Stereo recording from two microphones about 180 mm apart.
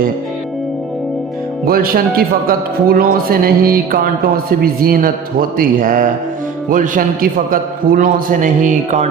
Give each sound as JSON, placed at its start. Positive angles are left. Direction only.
{"t": 1.6, "sound": "a man's voice", "side_deg": -55}